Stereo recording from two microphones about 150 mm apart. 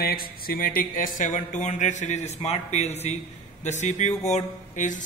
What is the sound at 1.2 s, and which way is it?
A man's voice, 60° left (ahead or behind).